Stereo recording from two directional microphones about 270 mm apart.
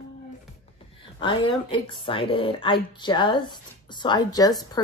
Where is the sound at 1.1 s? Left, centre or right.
Centre.